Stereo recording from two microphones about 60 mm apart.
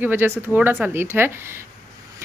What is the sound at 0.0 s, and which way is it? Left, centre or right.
Speech, right.